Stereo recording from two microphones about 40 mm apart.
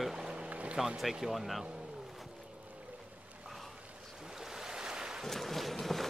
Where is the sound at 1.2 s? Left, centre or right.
Centre.